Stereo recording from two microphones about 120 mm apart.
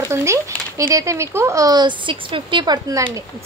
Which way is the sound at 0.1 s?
25° right (ahead or behind).